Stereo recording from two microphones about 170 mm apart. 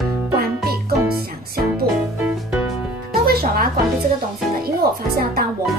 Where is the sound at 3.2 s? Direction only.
60° right (ahead or behind).